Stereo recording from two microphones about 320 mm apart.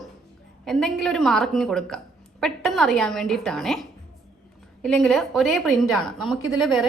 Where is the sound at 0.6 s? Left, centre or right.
Centre.